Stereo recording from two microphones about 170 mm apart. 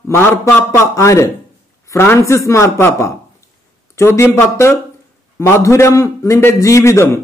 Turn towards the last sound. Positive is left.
turn(degrees=15)  # may be behind; listen again after turning